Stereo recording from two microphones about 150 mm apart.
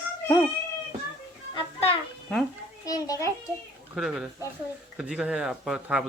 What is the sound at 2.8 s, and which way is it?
Speech, 25° left (ahead or behind).